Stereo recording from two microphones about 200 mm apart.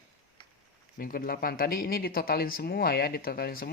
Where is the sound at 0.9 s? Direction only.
45° left (ahead or behind).